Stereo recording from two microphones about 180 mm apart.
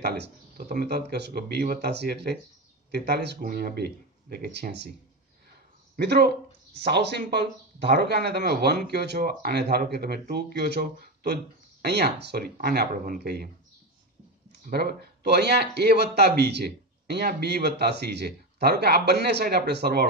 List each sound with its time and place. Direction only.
0.0 s speech: 65° right (ahead or behind)
5.9 s speech: 65° right (ahead or behind)
14.5 s speech: 60° right (ahead or behind)